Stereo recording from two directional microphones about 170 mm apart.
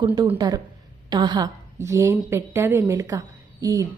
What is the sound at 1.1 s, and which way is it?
A woman's voice, 25° right (ahead or behind).